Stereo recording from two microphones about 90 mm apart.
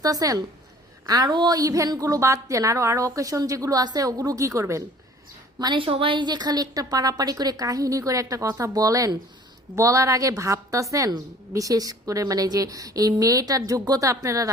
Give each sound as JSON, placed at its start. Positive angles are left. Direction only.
{"t": 0.0, "sound": "a woman's voice", "side_deg": -40}
{"t": 5.5, "sound": "a woman's voice", "side_deg": -50}
{"t": 5.8, "sound": "a woman's voice", "side_deg": -80}